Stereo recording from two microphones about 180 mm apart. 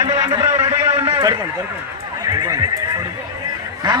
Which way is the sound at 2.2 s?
20° right (ahead or behind).